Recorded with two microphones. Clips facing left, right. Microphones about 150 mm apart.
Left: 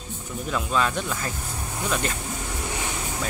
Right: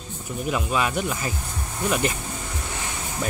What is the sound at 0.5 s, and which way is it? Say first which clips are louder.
Speech: even; 10° right (ahead or behind).